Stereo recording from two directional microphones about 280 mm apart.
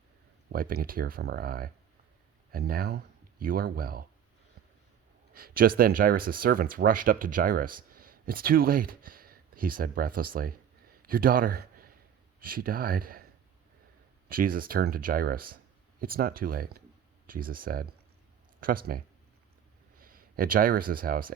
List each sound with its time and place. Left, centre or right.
0.5 s speech: right
5.3 s a man's voice: right
14.3 s speech: right